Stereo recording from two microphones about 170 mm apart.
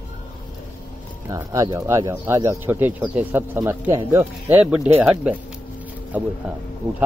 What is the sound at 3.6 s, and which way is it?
Speech, 25° right (ahead or behind).